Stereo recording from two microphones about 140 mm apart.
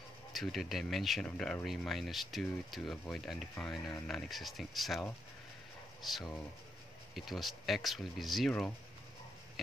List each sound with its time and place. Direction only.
0.3 s speech: centre (ahead or behind)
6.0 s speech: centre (ahead or behind)